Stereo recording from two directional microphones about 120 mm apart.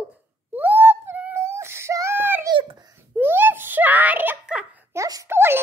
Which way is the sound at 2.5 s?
50° right (ahead or behind).